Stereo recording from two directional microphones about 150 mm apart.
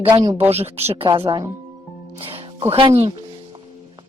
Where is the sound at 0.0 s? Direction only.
30° right (ahead or behind).